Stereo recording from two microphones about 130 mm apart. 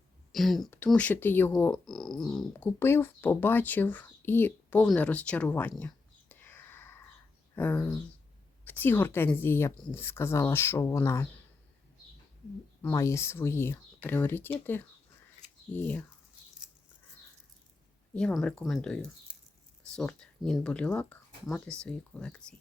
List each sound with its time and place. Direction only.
0.3 s speech: centre (ahead or behind)
1.7 s a sound: centre (ahead or behind)
2.5 s speech: 15° left (ahead or behind)
5.7 s a sound: 15° left (ahead or behind)
7.5 s speech: 15° left (ahead or behind)
12.9 s speech: 20° left (ahead or behind)
18.1 s speech: 5° left (ahead or behind)
18.6 s a sound: 5° left (ahead or behind)
19.8 s speech: 5° left (ahead or behind)